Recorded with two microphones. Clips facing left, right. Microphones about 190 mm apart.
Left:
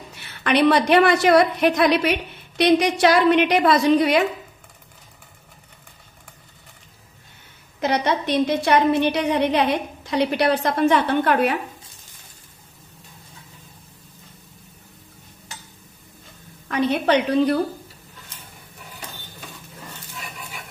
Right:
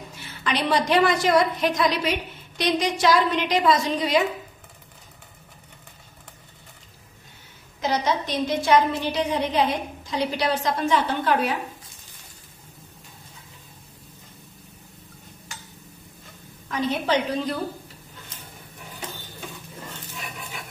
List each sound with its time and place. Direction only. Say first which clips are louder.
0.4 s a woman's voice: left 6 dB; 60° left (ahead or behind)
7.8 s a woman's voice: left 3 dB; 60° left (ahead or behind)
16.7 s a woman's voice: left 4 dB; 65° left (ahead or behind)